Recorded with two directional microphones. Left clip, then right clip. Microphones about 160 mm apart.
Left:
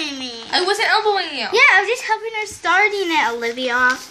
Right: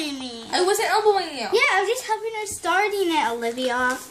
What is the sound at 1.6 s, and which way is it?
A woman's voice, 30° right (ahead or behind).